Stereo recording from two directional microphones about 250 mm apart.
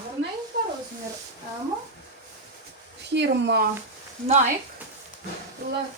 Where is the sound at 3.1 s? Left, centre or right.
Right.